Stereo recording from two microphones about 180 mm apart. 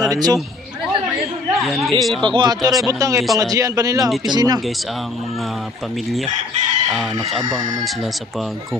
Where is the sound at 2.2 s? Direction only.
25° right (ahead or behind).